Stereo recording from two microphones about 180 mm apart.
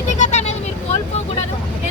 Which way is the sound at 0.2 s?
40° left (ahead or behind).